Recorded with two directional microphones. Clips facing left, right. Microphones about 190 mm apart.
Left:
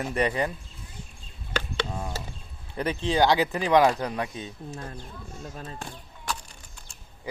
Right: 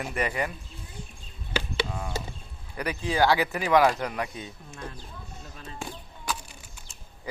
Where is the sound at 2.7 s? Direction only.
25° left (ahead or behind).